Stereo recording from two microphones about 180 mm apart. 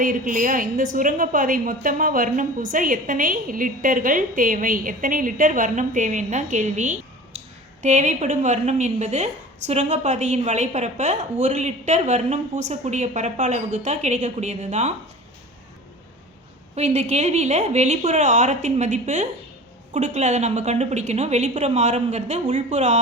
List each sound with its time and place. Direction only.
0.0 s a woman's voice: 50° right (ahead or behind)
16.7 s speech: 35° right (ahead or behind)